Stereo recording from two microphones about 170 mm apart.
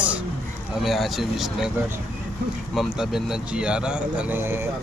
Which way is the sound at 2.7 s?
Centre (ahead or behind).